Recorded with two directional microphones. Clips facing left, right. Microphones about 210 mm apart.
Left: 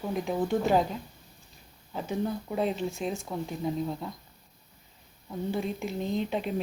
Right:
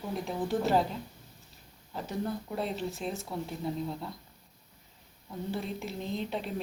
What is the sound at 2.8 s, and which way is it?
Speech, centre (ahead or behind).